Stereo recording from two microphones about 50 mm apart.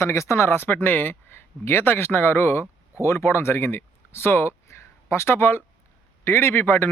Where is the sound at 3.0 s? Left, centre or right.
Left.